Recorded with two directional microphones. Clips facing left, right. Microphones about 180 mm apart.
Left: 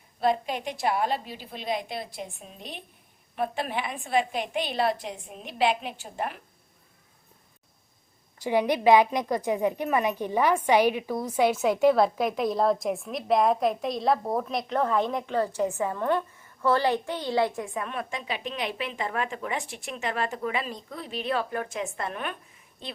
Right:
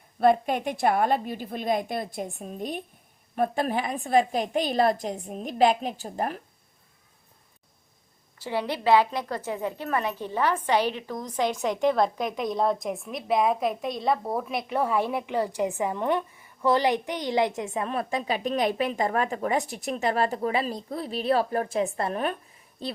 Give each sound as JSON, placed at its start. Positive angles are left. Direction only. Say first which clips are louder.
{"t": 0.2, "sound": "a woman's voice", "louder": "right 5 dB", "side_deg": -55}
{"t": 8.4, "sound": "a woman's voice", "louder": "left 3 dB", "side_deg": 15}
{"t": 17.8, "sound": "speech", "louder": "right 5 dB", "side_deg": -35}